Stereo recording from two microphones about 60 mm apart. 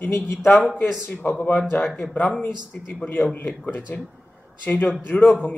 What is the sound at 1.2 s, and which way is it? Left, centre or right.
Speech, left.